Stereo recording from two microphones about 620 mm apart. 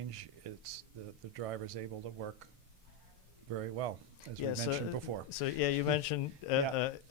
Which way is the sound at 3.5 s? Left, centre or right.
Right.